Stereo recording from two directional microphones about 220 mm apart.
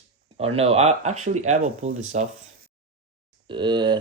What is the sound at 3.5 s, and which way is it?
Speech, 20° right (ahead or behind).